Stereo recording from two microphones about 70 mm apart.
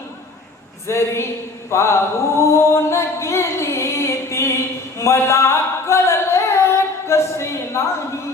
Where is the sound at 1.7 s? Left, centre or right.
Left.